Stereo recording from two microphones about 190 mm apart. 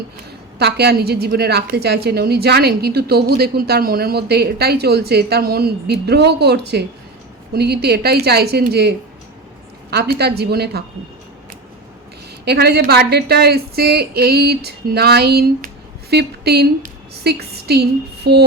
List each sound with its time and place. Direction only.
0.6 s a woman's voice: 60° right (ahead or behind)
12.5 s a woman's voice: 60° right (ahead or behind)